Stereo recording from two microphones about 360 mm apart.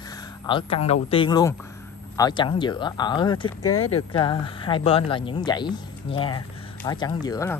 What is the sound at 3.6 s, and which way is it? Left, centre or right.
Speech, left.